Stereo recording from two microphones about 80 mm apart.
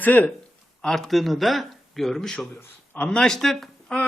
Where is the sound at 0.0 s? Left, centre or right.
Left.